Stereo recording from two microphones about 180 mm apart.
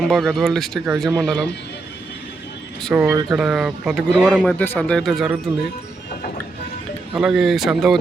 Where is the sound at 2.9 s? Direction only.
15° right (ahead or behind).